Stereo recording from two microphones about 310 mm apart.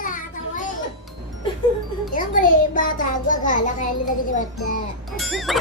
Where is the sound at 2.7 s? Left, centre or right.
Left.